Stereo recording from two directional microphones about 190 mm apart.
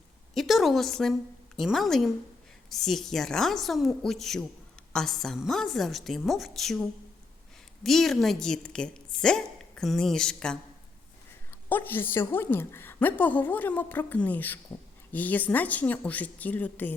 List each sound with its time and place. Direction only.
0.3 s a woman's voice: centre (ahead or behind)
7.9 s a woman's voice: centre (ahead or behind)
11.7 s a woman's voice: 10° left (ahead or behind)